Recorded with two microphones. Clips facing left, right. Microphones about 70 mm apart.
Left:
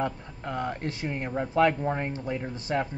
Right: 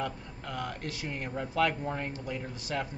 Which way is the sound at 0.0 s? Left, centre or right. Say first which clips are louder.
Left 5 dB; left.